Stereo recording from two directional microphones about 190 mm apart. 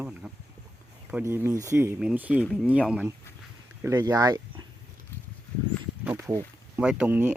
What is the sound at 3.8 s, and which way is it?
Speech, 15° right (ahead or behind).